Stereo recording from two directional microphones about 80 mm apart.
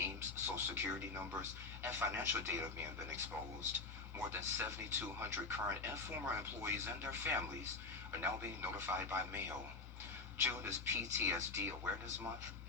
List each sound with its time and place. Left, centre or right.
0.0 s speech: right
4.3 s speech: right
10.4 s speech: right